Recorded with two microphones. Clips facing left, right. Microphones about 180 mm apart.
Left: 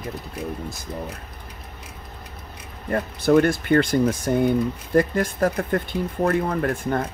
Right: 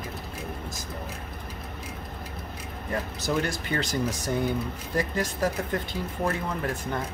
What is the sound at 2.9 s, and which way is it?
Speech, 55° left (ahead or behind).